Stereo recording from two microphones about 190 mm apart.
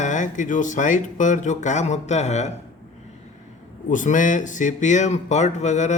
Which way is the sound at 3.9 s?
40° left (ahead or behind).